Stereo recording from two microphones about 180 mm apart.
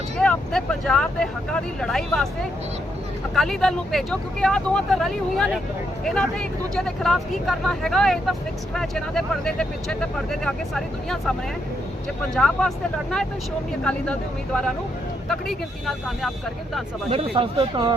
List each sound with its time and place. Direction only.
0.2 s speech: 5° left (ahead or behind)
3.3 s speech: centre (ahead or behind)
17.3 s speech: 30° right (ahead or behind)